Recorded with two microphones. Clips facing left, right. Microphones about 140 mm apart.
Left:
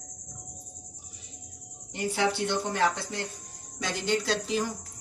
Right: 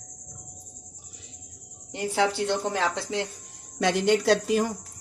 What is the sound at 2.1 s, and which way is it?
Speech, 90° right.